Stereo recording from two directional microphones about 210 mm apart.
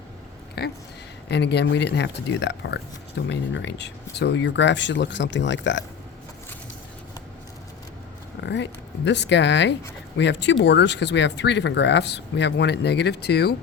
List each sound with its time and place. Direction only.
0.6 s speech: 50° left (ahead or behind)
8.4 s speech: 55° left (ahead or behind)